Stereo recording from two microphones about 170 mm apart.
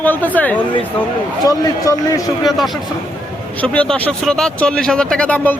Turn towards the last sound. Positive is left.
turn(degrees=5)  # may be behind; listen again after turning